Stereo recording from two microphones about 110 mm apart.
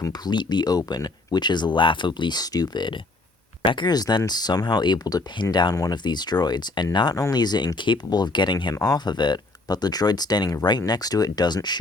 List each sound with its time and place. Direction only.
0.0 s speech: 40° left (ahead or behind)